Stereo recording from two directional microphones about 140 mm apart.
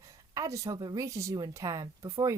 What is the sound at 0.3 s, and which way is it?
Speech, 25° right (ahead or behind).